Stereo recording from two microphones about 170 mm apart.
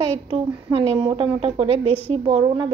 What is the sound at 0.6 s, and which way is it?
A woman's voice, 30° right (ahead or behind).